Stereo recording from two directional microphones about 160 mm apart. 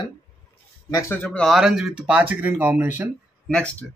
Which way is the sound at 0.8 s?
20° left (ahead or behind).